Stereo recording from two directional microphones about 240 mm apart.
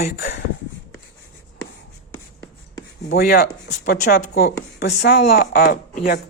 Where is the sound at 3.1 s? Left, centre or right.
Left.